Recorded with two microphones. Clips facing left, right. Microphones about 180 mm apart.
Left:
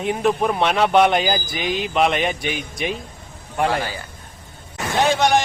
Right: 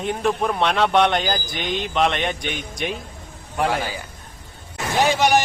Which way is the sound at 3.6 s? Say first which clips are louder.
Left 1 dB; 10° right (ahead or behind).